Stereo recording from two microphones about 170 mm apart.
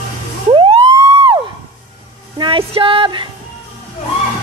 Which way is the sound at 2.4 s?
30° right (ahead or behind).